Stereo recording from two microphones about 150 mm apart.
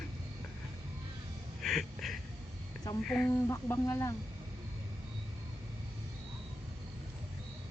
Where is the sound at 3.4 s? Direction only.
20° left (ahead or behind).